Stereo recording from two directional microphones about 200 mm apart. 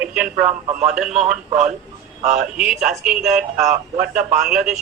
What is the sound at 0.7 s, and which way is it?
Speech, 35° right (ahead or behind).